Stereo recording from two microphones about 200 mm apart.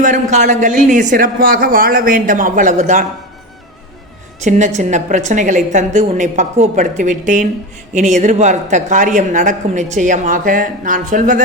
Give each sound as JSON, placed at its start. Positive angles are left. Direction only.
{"t": 0.0, "sound": "a man's voice", "side_deg": -35}
{"t": 4.4, "sound": "a man's voice", "side_deg": -35}